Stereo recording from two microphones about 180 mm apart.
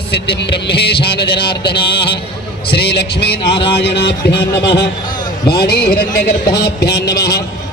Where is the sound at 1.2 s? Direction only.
30° left (ahead or behind).